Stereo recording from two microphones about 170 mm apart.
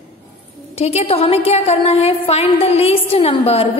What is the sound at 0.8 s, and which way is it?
A woman's voice, 35° left (ahead or behind).